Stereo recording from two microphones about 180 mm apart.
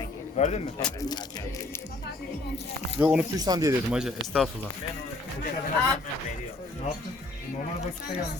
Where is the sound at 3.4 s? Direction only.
20° right (ahead or behind).